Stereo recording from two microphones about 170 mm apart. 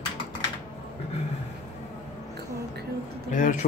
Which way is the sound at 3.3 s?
45° left (ahead or behind).